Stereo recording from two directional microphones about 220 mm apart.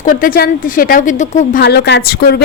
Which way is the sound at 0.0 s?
35° left (ahead or behind).